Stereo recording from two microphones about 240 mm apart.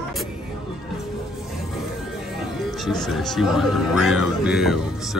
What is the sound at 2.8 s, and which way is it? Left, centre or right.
Speech, centre.